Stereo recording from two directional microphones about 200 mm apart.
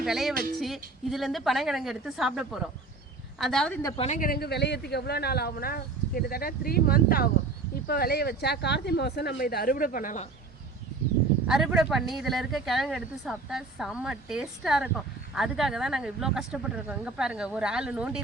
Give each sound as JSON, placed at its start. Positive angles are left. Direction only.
{"t": 0.0, "sound": "speech", "side_deg": 0}
{"t": 3.8, "sound": "speech", "side_deg": 30}
{"t": 11.4, "sound": "speech", "side_deg": -5}